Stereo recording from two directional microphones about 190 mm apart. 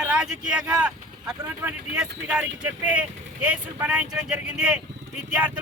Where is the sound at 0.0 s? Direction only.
5° right (ahead or behind).